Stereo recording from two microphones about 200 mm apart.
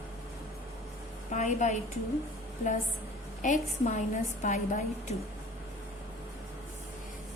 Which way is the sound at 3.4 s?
40° left (ahead or behind).